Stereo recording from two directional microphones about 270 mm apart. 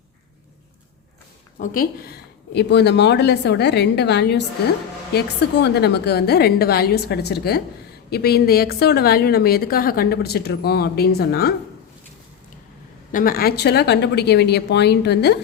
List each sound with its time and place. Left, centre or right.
1.5 s a woman's voice: left
13.1 s a woman's voice: left